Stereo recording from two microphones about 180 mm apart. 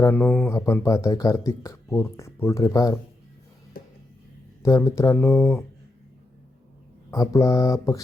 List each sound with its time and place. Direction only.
0.0 s speech: 10° left (ahead or behind)
4.6 s speech: 15° left (ahead or behind)
7.1 s speech: 20° left (ahead or behind)